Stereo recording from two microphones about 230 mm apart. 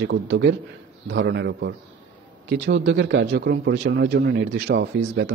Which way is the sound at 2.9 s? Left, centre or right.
Right.